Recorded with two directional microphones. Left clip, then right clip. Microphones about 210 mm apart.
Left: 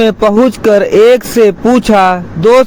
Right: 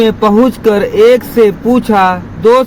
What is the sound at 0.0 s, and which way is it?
A man's voice, 35° left (ahead or behind).